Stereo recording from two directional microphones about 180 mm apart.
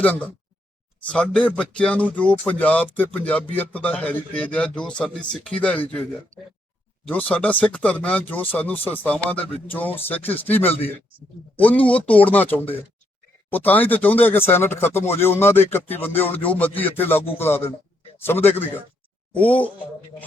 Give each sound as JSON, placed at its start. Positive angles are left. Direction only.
{"t": 0.0, "sound": "speech", "side_deg": 10}
{"t": 6.3, "sound": "speech", "side_deg": -45}
{"t": 7.1, "sound": "speech", "side_deg": 10}